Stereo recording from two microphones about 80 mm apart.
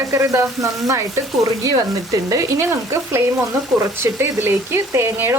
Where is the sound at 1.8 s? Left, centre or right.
Right.